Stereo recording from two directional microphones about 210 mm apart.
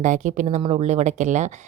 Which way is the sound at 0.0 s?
35° right (ahead or behind).